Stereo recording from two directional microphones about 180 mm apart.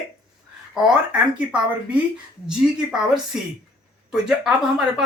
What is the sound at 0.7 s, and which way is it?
Speech, 5° right (ahead or behind).